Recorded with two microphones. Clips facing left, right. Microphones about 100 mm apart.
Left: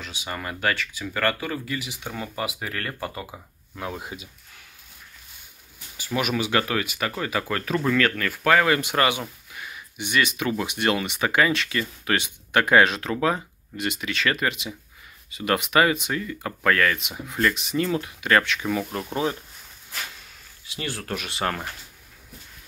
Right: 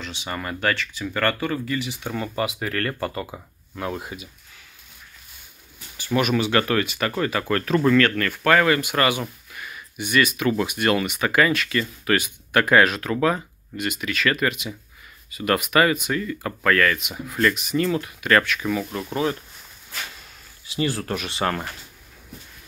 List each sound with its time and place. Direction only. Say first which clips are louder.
0.0 s speech: right 2 dB; 5° left (ahead or behind)
4.0 s speech: right 1 dB; 20° left (ahead or behind)
5.9 s speech: right 4 dB; 10° left (ahead or behind)
8.6 s speech: right 1 dB; 25° left (ahead or behind)
9.5 s a sound: right 1 dB; 20° left (ahead or behind)
10.6 s speech: right 1 dB; 20° left (ahead or behind)
20.6 s speech: right 8 dB; centre (ahead or behind)